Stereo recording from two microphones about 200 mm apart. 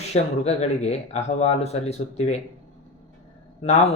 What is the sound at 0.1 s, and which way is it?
Speech, 35° left (ahead or behind).